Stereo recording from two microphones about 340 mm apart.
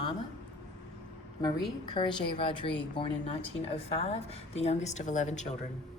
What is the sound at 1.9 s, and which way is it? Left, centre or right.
A woman's voice, centre.